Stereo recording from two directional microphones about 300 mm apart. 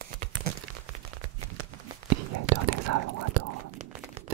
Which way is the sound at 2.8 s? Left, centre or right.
Right.